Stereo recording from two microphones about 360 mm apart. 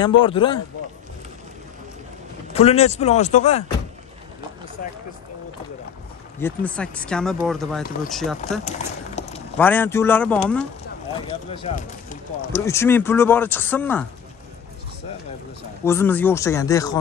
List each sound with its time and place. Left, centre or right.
0.0 s speech: centre
2.5 s speech: centre
6.4 s speech: centre
8.6 s clip-clop: centre
9.6 s speech: centre
11.1 s speech: centre
12.6 s speech: centre
15.8 s speech: centre